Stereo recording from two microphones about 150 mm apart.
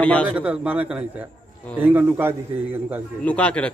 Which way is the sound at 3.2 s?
10° left (ahead or behind).